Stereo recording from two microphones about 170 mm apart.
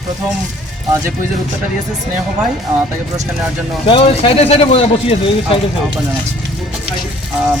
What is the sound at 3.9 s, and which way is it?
Speech, 30° left (ahead or behind).